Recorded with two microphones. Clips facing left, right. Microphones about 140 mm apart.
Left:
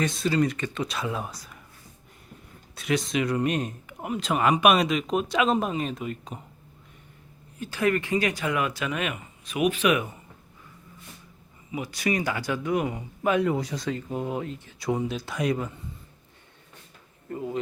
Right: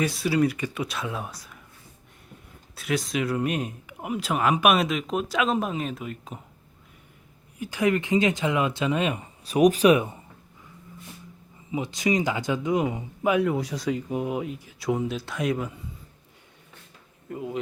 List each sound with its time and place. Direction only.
0.0 s speech: 5° right (ahead or behind)
2.7 s speech: centre (ahead or behind)
7.6 s speech: 15° right (ahead or behind); by 10.2 s 30° right (ahead or behind)
11.7 s speech: 20° right (ahead or behind)
13.3 s speech: centre (ahead or behind)
17.2 s speech: 5° right (ahead or behind)